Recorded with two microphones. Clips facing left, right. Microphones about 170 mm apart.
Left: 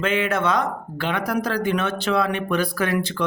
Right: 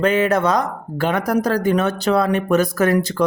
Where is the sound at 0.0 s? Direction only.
40° right (ahead or behind).